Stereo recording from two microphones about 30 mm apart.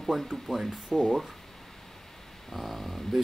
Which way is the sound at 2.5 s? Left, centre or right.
Centre.